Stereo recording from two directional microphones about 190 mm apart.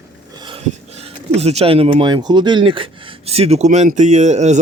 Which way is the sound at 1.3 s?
35° right (ahead or behind).